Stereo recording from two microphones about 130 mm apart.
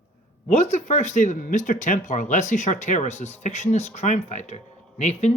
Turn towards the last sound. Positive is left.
turn(degrees=60)  # may be behind; listen again after turning